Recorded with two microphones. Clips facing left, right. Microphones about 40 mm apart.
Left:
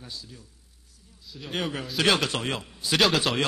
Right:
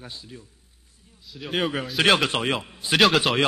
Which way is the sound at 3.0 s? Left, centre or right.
Centre.